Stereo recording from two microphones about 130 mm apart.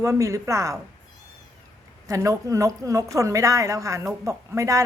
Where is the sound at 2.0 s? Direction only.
25° right (ahead or behind).